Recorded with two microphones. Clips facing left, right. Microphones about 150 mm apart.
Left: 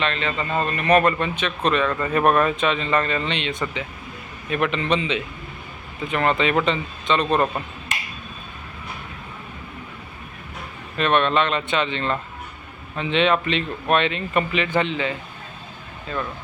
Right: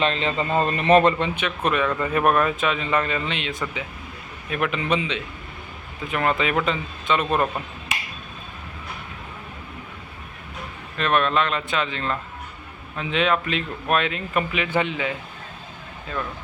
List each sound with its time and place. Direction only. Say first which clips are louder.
0.0 s speech: right 2 dB; 30° right (ahead or behind)
1.4 s speech: left 1 dB; 10° right (ahead or behind)
6.1 s speech: left 2 dB; 5° right (ahead or behind)
10.9 s speech: left 2 dB; centre (ahead or behind)